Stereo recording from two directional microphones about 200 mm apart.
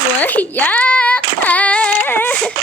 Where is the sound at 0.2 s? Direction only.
10° left (ahead or behind).